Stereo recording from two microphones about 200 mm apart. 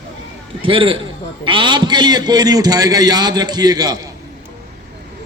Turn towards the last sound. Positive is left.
turn(degrees=-20)  # may be behind; listen again after turning